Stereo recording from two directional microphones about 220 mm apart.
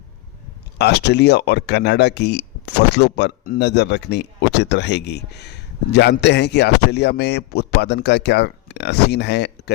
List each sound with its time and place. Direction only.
0.8 s speech: 50° left (ahead or behind)